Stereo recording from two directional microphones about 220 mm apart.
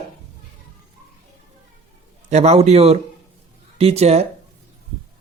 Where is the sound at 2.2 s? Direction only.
30° right (ahead or behind).